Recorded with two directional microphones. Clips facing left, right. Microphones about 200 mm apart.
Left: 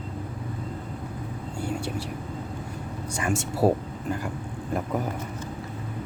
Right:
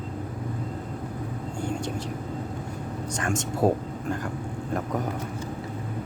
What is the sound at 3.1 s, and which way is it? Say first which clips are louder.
Speech: left 2 dB; 10° left (ahead or behind).